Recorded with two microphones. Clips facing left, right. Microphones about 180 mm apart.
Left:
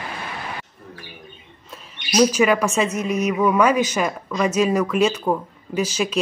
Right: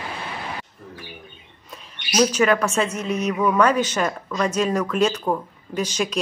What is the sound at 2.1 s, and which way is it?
A woman's voice, 10° left (ahead or behind).